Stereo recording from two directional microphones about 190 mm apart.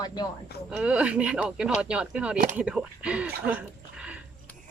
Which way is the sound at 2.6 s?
5° right (ahead or behind).